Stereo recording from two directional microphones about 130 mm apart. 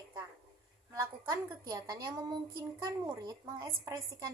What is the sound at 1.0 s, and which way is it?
A woman's voice, 25° right (ahead or behind).